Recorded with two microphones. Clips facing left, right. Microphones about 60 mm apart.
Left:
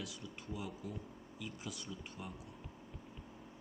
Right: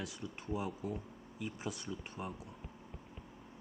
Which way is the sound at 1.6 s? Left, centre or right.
Right.